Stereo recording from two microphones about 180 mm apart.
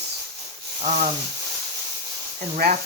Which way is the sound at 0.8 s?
40° right (ahead or behind).